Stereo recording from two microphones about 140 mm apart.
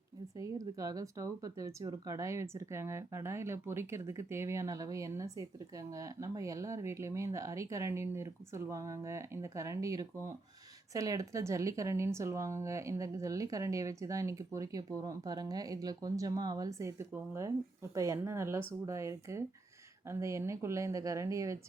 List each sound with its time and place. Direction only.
0.3 s speech: 25° right (ahead or behind)